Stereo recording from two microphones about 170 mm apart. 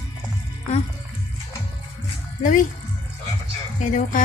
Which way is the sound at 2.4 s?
50° left (ahead or behind).